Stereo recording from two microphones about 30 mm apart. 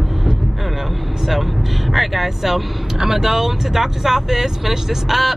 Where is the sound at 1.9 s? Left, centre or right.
Centre.